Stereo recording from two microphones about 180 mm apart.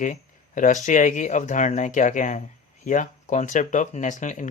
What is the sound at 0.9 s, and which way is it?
Speech, 45° left (ahead or behind).